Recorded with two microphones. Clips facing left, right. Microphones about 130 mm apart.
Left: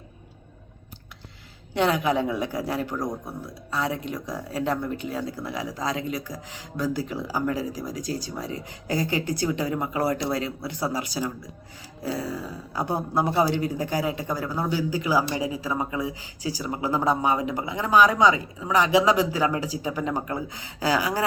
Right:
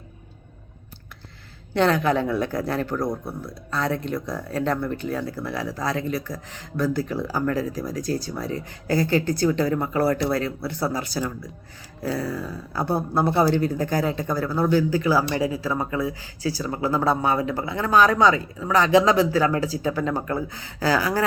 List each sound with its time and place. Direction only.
1.7 s speech: 15° left (ahead or behind)